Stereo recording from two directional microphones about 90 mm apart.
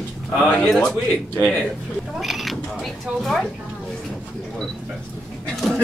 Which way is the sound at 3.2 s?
Centre (ahead or behind).